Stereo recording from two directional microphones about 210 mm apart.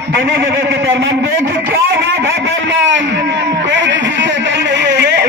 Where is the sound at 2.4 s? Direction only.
60° right (ahead or behind).